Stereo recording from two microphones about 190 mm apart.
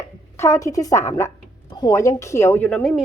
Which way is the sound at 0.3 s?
15° left (ahead or behind).